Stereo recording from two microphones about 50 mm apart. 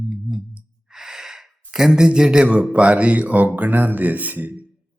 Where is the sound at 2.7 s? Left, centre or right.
Right.